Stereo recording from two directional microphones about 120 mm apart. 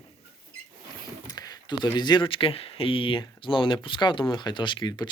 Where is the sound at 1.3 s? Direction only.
35° left (ahead or behind).